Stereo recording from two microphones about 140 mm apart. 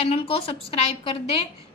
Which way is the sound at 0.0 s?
45° left (ahead or behind).